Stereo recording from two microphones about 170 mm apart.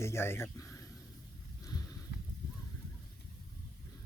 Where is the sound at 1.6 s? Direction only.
20° left (ahead or behind).